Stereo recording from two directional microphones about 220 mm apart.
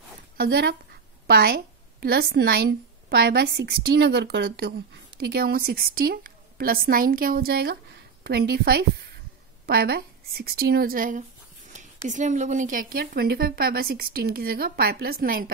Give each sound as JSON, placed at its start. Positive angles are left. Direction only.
{"t": 0.4, "sound": "a woman's voice", "side_deg": -45}